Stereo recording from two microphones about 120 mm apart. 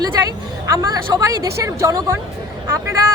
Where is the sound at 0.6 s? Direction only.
25° right (ahead or behind).